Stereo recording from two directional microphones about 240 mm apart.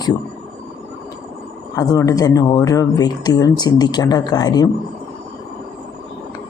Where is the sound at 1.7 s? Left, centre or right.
Centre.